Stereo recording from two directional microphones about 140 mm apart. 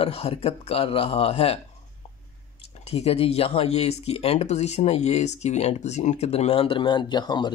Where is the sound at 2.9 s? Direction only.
45° left (ahead or behind).